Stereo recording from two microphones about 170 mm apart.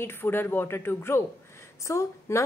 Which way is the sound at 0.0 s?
15° left (ahead or behind).